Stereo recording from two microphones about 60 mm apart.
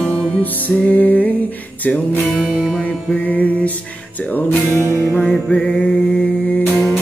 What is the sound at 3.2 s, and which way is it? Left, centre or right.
Music, left.